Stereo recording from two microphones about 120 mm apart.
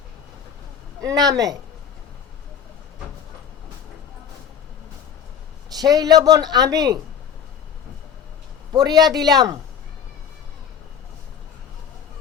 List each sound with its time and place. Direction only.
1.0 s speech: 30° right (ahead or behind)
5.7 s speech: 35° right (ahead or behind)
8.7 s speech: 35° right (ahead or behind)